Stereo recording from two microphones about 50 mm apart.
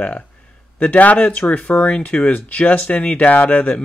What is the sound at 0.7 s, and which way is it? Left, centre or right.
Speech, left.